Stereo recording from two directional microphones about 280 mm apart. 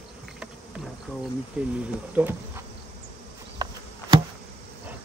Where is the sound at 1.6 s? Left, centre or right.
Centre.